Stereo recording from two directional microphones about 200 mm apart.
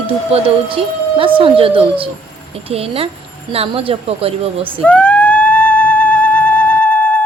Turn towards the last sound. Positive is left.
turn(degrees=5)  # may be behind; listen again after turning